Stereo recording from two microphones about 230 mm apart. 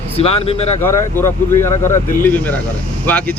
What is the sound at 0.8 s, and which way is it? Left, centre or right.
Speech, centre.